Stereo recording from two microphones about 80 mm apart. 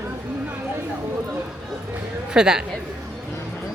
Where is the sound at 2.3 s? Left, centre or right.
Centre.